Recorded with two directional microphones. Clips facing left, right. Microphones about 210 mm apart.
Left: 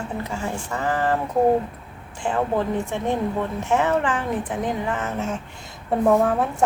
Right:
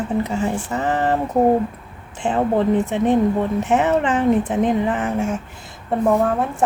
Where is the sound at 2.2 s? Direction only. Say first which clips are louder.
Right 5 dB; 20° right (ahead or behind).